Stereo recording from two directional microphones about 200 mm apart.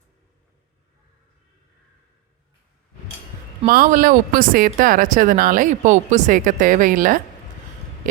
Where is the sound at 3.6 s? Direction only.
45° right (ahead or behind).